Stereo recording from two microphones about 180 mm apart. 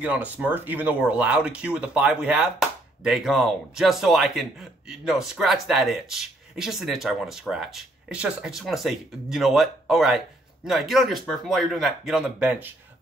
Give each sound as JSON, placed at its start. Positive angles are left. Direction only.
{"t": 0.0, "sound": "speech", "side_deg": -10}